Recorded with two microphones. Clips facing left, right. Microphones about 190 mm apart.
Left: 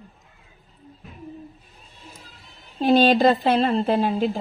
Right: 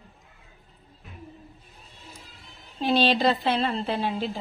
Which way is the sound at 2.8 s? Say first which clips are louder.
Left 6 dB; 50° left (ahead or behind).